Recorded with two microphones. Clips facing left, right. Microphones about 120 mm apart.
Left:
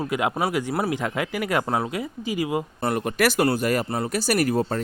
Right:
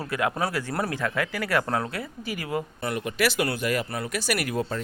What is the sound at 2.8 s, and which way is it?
Speech, 45° left (ahead or behind).